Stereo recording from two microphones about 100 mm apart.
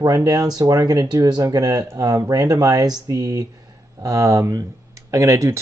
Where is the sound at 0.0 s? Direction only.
35° right (ahead or behind).